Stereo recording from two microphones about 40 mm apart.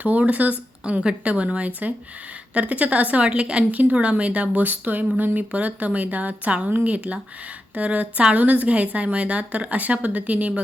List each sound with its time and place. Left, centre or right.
0.0 s a woman's voice: right
0.8 s a woman's voice: right
3.7 s a woman's voice: right